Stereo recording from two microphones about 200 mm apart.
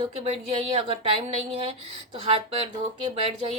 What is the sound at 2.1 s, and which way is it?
Speech, 30° right (ahead or behind).